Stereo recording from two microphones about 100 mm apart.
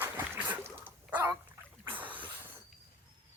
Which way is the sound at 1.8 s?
20° right (ahead or behind).